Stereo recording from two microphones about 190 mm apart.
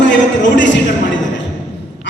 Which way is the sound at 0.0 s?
70° left (ahead or behind).